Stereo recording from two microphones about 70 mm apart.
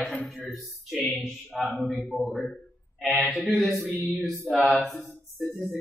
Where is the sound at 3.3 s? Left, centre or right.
Centre.